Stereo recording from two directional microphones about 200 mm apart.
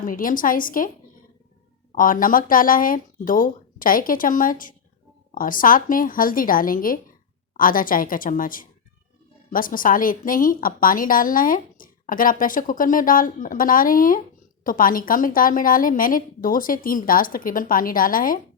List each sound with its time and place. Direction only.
0.0 s a woman's voice: 45° left (ahead or behind)
2.0 s a woman's voice: 45° left (ahead or behind)